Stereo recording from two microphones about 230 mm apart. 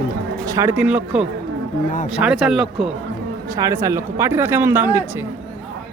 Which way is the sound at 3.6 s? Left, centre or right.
Centre.